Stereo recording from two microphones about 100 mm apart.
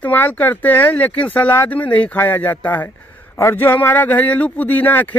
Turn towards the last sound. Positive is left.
turn(degrees=15)  # may be behind; listen again after turning